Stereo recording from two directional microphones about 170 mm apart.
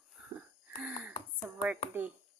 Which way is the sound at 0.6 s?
5° right (ahead or behind).